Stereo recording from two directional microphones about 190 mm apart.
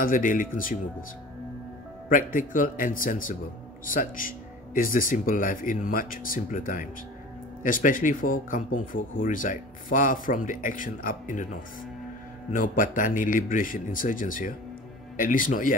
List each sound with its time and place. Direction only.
0.0 s speech: 45° left (ahead or behind)
2.0 s speech: 45° left (ahead or behind)
12.5 s speech: 45° left (ahead or behind)